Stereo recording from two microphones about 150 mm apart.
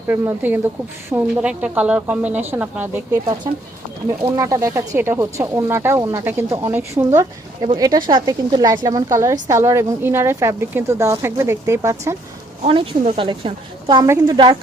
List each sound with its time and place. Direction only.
0.1 s speech: 15° right (ahead or behind)
3.1 s a woman's voice: 30° right (ahead or behind)
7.6 s a woman's voice: 30° right (ahead or behind)
12.6 s a woman's voice: 40° right (ahead or behind)